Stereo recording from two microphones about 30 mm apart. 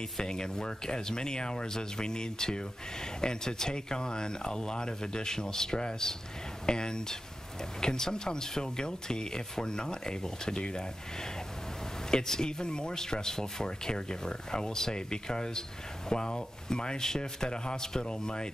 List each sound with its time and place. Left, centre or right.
0.2 s speech: left
12.1 s speech: left